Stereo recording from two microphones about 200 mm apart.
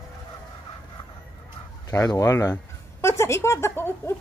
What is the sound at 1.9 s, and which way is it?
Speech, 15° left (ahead or behind).